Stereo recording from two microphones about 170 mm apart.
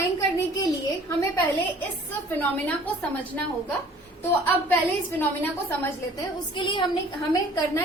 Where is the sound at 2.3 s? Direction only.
10° left (ahead or behind).